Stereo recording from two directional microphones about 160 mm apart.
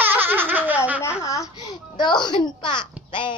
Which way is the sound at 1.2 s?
20° left (ahead or behind).